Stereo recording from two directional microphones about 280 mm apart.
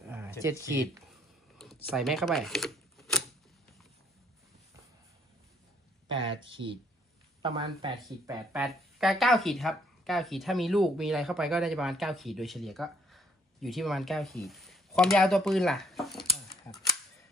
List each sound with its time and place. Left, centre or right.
1.6 s computer keyboard: centre
2.0 s speech: centre
6.0 s speech: centre
8.5 s speech: centre